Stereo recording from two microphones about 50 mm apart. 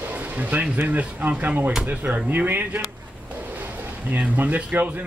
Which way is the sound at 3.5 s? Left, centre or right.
Right.